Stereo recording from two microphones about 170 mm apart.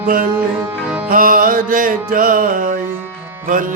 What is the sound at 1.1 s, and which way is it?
Music, 55° right (ahead or behind).